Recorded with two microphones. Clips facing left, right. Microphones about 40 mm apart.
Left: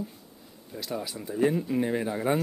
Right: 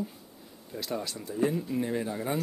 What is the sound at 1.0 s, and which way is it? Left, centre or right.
Speech, centre.